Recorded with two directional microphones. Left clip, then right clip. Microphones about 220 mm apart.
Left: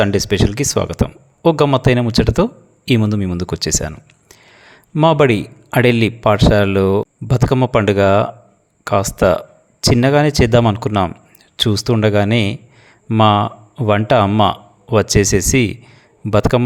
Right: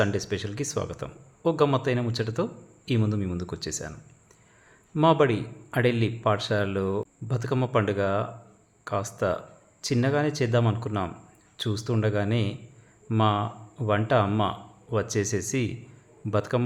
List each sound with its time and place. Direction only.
0.0 s speech: 40° left (ahead or behind)